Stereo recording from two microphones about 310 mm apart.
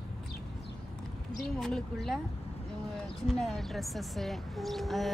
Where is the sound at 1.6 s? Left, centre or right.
Centre.